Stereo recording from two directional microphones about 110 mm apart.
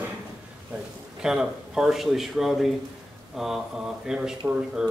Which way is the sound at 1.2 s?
5° right (ahead or behind).